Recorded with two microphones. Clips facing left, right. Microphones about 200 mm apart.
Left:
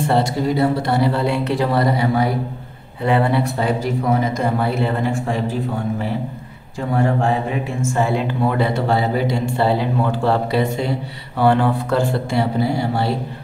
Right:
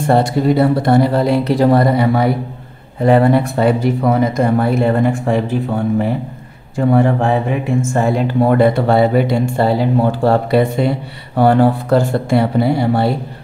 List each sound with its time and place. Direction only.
0.0 s speech: 50° right (ahead or behind)
3.0 s speech: 45° right (ahead or behind)
6.8 s speech: 60° right (ahead or behind)
7.9 s speech: 45° right (ahead or behind)
9.7 s speech: 40° right (ahead or behind)
11.3 s speech: 40° right (ahead or behind); by 13.1 s 60° right (ahead or behind)